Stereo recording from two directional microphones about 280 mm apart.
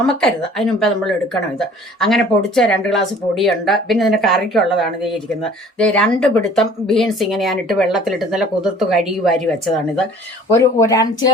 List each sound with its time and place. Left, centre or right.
0.0 s speech: centre
10.6 s speech: centre